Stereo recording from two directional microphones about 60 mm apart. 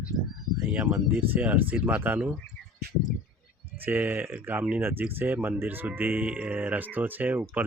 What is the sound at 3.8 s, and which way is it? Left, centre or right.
Speech, right.